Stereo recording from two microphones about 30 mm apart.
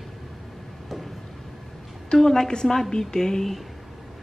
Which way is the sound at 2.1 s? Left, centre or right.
Centre.